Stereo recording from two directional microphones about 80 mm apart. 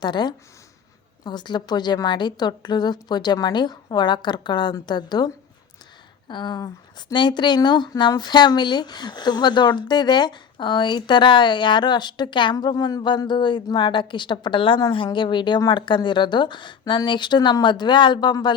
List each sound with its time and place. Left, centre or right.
0.0 s a woman's voice: left
7.1 s a woman's voice: left
12.5 s a woman's voice: left
13.2 s a woman's voice: left
17.1 s a woman's voice: left